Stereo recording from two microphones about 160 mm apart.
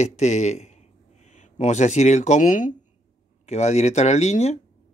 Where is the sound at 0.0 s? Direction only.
45° left (ahead or behind).